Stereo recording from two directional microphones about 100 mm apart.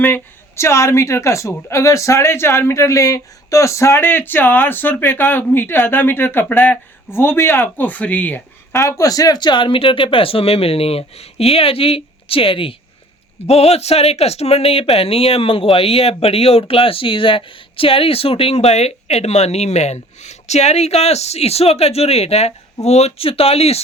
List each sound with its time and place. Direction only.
0.0 s speech: 25° left (ahead or behind)
8.8 s speech: 30° left (ahead or behind); by 12.7 s 65° left (ahead or behind)
13.5 s speech: 90° left